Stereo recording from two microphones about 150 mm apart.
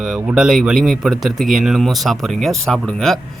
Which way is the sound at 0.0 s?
Centre (ahead or behind).